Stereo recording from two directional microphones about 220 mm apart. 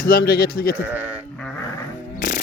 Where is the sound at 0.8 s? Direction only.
10° right (ahead or behind).